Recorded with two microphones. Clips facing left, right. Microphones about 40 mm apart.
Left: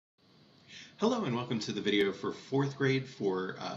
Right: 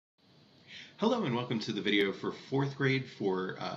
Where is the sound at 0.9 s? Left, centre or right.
Centre.